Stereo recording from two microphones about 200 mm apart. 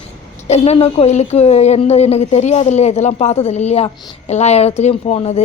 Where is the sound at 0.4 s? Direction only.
35° left (ahead or behind).